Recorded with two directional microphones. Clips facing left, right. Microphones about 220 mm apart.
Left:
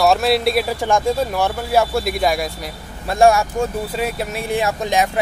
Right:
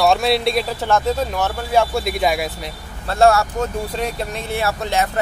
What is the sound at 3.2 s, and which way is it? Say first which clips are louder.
Speech: left 1 dB; 15° left (ahead or behind).